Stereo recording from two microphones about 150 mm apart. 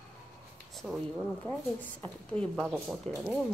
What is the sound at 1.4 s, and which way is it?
Speech, 10° left (ahead or behind).